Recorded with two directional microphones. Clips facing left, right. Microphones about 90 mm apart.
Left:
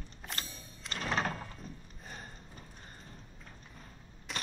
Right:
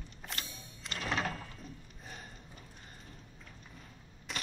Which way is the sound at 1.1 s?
35° left (ahead or behind).